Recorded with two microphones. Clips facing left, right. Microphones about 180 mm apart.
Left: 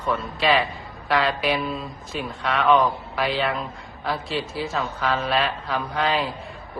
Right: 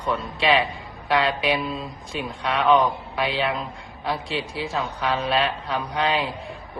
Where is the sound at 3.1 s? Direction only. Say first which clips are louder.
Even; 20° right (ahead or behind).